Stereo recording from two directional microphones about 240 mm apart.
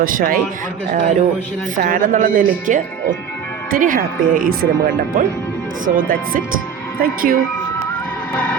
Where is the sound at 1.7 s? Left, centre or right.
Right.